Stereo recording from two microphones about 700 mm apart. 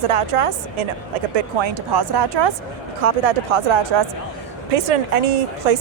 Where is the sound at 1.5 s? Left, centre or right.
Right.